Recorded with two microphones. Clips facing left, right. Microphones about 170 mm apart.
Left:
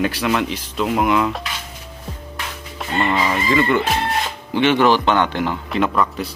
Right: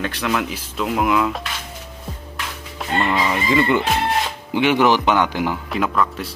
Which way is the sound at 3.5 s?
15° right (ahead or behind).